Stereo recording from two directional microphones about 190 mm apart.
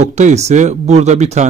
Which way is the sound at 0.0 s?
35° right (ahead or behind).